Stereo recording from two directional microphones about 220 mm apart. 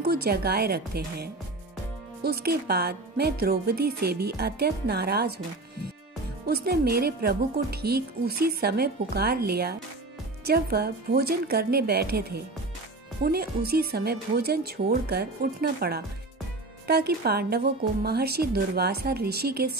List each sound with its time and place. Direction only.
0.0 s a woman's voice: 45° right (ahead or behind)
6.4 s a woman's voice: 45° right (ahead or behind)